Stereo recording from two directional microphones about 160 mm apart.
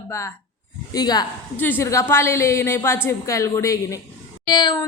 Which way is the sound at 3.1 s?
20° left (ahead or behind).